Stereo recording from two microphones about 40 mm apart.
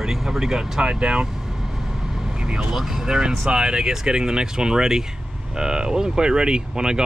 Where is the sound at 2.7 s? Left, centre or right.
Centre.